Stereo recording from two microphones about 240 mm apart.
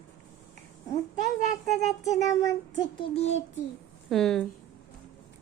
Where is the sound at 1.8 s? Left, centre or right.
Centre.